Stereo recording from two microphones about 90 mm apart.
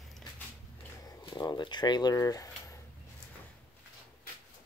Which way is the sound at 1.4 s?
55° left (ahead or behind).